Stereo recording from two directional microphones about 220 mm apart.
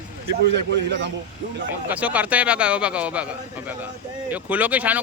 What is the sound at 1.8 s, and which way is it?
Speech, 5° right (ahead or behind).